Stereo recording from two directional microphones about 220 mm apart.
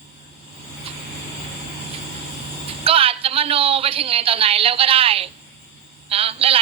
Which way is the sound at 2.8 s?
25° right (ahead or behind).